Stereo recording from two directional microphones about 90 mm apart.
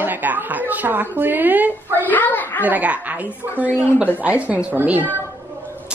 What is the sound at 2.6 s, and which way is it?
Speech, 15° right (ahead or behind).